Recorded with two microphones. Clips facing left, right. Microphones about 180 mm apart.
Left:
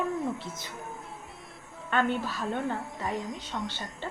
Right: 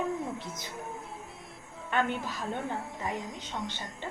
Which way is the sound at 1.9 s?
15° right (ahead or behind).